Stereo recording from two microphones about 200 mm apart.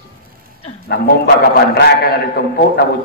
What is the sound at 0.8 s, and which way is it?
A man's voice, 55° left (ahead or behind).